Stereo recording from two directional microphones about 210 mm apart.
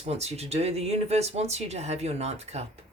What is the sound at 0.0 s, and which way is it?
Speech, 30° right (ahead or behind).